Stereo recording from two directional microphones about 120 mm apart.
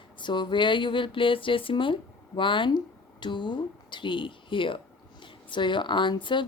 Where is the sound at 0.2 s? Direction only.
40° left (ahead or behind).